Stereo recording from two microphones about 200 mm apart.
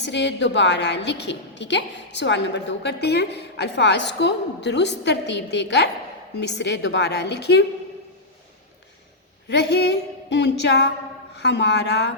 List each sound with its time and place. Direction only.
0.1 s a woman's voice: 60° left (ahead or behind)
9.5 s a woman's voice: 60° left (ahead or behind)